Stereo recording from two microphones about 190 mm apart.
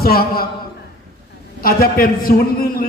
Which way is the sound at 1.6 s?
50° left (ahead or behind).